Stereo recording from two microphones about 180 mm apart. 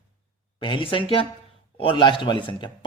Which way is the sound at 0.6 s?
30° left (ahead or behind).